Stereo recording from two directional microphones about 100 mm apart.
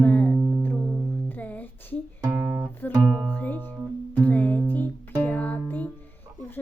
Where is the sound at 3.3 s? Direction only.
20° left (ahead or behind).